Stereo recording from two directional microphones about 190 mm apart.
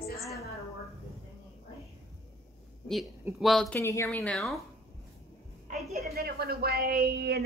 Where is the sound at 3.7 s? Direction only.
15° left (ahead or behind).